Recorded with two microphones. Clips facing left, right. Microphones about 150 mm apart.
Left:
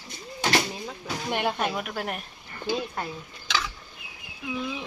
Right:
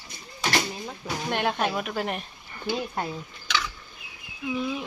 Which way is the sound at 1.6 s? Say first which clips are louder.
Right 2 dB; centre (ahead or behind).